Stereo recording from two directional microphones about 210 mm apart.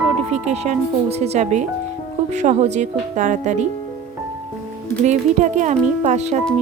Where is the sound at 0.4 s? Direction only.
30° right (ahead or behind).